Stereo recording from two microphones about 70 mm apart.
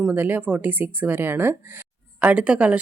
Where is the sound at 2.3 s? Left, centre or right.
Centre.